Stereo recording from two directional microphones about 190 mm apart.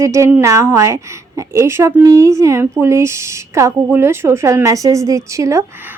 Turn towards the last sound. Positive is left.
turn(degrees=-15)  # may be behind; listen again after turning